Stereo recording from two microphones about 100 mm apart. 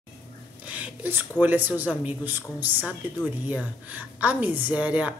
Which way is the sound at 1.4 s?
15° right (ahead or behind).